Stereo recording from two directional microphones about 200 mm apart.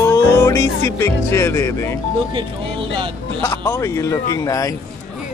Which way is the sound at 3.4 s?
15° left (ahead or behind).